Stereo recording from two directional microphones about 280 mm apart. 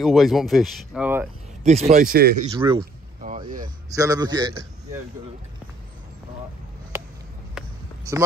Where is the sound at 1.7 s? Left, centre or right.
Right.